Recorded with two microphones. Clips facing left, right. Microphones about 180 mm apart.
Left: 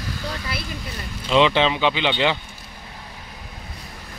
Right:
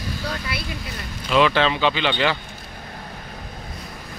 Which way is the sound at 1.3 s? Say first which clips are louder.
Left 1 dB; 20° left (ahead or behind).